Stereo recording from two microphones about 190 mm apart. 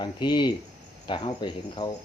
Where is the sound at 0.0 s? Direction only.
25° left (ahead or behind).